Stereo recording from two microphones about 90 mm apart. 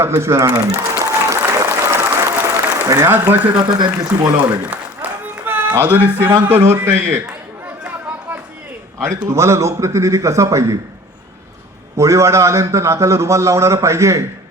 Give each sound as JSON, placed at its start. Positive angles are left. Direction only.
{"t": 0.0, "sound": "speech", "side_deg": -30}
{"t": 1.5, "sound": "applause", "side_deg": -30}
{"t": 3.5, "sound": "speech", "side_deg": -50}
{"t": 4.6, "sound": "a sound", "side_deg": -15}
{"t": 6.6, "sound": "a man's voice", "side_deg": -25}
{"t": 9.0, "sound": "a man's voice", "side_deg": -30}
{"t": 11.9, "sound": "a man's voice", "side_deg": -35}